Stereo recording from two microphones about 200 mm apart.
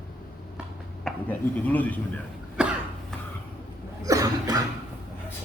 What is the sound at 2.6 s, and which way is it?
Cough, 5° right (ahead or behind).